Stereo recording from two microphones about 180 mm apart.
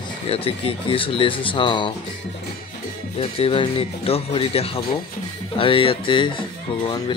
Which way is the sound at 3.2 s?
30° left (ahead or behind).